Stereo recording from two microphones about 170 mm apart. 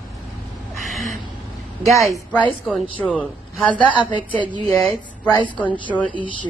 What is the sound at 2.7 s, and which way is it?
A man's voice, 10° left (ahead or behind).